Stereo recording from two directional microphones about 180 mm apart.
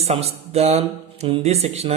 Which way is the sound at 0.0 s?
35° right (ahead or behind).